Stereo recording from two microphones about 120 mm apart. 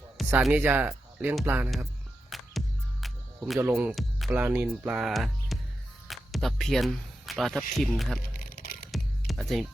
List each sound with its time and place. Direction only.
0.2 s music: centre (ahead or behind)
0.5 s speech: 15° right (ahead or behind)
2.3 s music: centre (ahead or behind)
3.6 s speech: 15° right (ahead or behind)
4.9 s speech: centre (ahead or behind)
8.9 s music: centre (ahead or behind)